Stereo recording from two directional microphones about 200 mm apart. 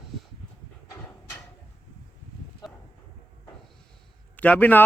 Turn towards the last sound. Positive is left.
turn(degrees=10)  # may be behind; listen again after turning